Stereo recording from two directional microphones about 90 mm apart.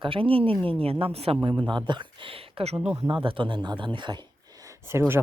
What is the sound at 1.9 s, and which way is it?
Speech, 65° right (ahead or behind).